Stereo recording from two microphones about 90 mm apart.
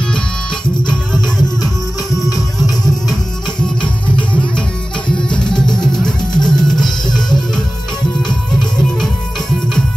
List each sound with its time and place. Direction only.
0.8 s music: 5° left (ahead or behind)
5.3 s music: 10° left (ahead or behind)
5.7 s music: 55° left (ahead or behind)